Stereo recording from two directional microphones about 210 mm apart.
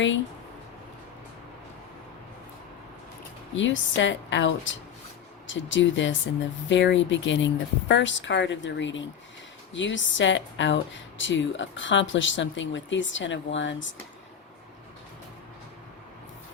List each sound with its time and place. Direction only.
3.5 s speech: 60° left (ahead or behind)